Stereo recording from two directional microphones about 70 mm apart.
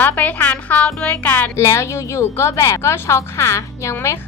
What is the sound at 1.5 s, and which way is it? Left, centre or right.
Speech, left.